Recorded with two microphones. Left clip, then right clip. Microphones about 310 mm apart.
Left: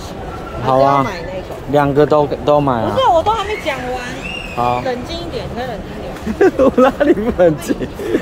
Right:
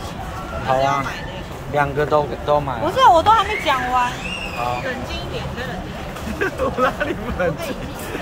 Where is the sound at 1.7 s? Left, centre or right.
Left.